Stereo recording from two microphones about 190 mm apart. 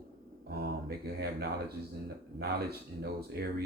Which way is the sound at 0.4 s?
55° right (ahead or behind).